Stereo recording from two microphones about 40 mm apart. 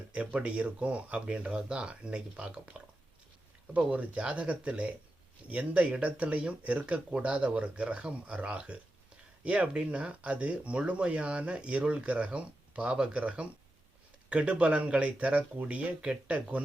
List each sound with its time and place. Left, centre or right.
0.2 s speech: right
3.8 s speech: right
9.4 s speech: right